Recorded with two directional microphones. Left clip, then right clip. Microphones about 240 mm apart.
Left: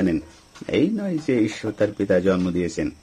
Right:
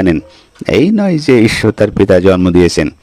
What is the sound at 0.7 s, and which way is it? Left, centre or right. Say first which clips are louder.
A man's voice: right 11 dB; right.